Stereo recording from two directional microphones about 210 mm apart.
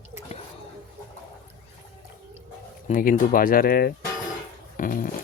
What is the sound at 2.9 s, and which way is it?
Speech, 40° left (ahead or behind).